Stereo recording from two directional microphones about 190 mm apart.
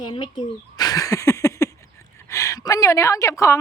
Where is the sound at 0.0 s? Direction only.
25° left (ahead or behind).